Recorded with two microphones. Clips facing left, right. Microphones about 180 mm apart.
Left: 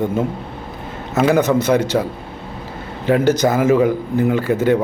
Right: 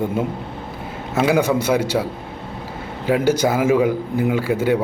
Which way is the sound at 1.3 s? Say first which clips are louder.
Left 3 dB; 10° right (ahead or behind).